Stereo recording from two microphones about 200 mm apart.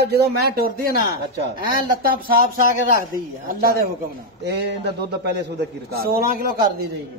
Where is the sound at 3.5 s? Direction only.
50° right (ahead or behind).